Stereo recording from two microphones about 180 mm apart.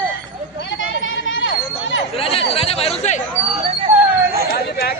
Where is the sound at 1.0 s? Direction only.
90° left.